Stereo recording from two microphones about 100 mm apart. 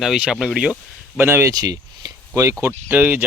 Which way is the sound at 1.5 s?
40° right (ahead or behind).